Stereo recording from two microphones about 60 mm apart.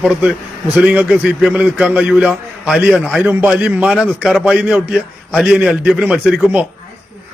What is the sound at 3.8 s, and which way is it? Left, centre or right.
A man's voice, centre.